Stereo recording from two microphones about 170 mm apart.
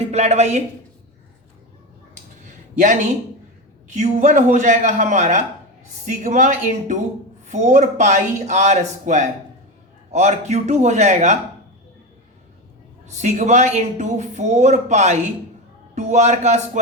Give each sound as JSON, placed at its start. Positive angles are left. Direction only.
{"t": 0.0, "sound": "a woman's voice", "side_deg": -40}
{"t": 3.9, "sound": "speech", "side_deg": -45}
{"t": 13.1, "sound": "speech", "side_deg": -40}